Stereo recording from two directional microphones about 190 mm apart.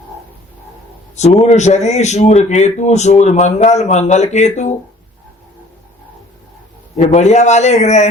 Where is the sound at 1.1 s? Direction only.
35° left (ahead or behind).